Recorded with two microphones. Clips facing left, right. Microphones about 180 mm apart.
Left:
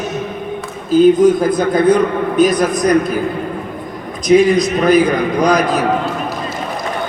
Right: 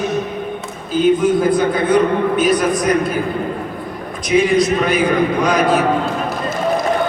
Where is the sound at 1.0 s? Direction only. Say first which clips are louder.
Left 3 dB; 40° left (ahead or behind).